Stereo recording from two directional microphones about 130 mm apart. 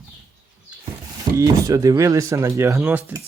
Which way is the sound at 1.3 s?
25° right (ahead or behind).